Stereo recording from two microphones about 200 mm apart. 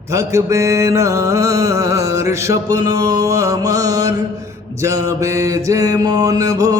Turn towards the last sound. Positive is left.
turn(degrees=-15)  # may be behind; listen again after turning